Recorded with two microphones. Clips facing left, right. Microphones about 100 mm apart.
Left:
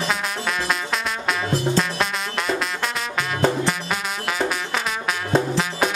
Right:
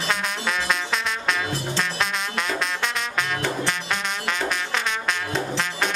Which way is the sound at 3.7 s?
5° left (ahead or behind).